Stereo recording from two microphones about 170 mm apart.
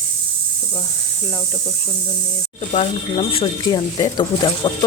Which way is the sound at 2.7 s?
35° left (ahead or behind).